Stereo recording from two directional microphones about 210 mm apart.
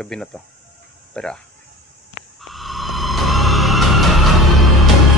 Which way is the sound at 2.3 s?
Centre (ahead or behind).